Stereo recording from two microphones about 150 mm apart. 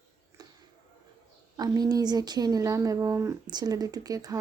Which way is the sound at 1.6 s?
25° right (ahead or behind).